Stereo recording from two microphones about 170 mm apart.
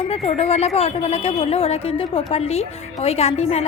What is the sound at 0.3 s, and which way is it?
A woman's voice, 35° left (ahead or behind).